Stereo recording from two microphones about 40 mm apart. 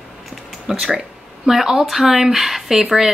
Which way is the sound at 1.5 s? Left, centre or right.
Centre.